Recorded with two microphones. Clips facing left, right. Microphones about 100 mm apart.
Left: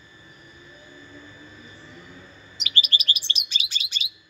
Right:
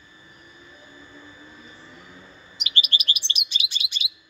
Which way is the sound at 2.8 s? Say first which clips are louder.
Even; 35° left (ahead or behind).